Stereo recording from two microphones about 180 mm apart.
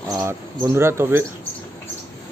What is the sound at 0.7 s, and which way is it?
Speech, 15° right (ahead or behind).